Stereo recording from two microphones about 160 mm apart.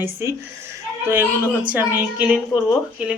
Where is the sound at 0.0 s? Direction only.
15° right (ahead or behind).